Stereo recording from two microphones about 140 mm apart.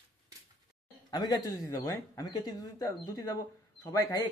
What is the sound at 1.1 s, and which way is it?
Speech, 30° left (ahead or behind).